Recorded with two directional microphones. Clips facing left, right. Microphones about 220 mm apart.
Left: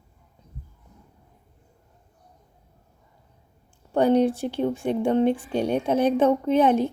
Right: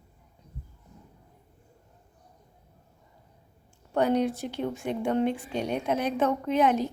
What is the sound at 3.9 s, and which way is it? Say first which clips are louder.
Speech: left 5 dB; 30° left (ahead or behind).